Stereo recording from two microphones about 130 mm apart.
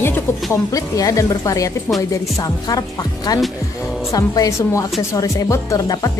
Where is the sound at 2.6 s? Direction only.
30° left (ahead or behind).